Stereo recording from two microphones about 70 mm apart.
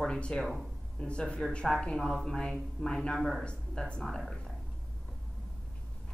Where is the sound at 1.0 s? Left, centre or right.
Centre.